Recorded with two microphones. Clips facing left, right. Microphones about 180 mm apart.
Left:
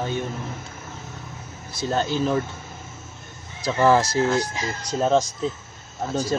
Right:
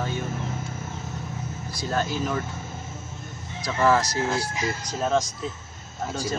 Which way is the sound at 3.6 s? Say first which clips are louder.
Left 3 dB; 30° left (ahead or behind).